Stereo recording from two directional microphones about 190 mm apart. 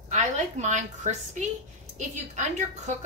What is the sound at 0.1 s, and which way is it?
A woman's voice, 40° right (ahead or behind).